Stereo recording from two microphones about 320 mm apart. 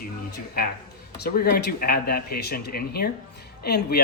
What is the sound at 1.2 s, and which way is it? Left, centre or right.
Speech, left.